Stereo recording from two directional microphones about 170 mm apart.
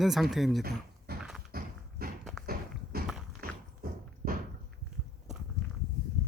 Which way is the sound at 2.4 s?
60° right (ahead or behind).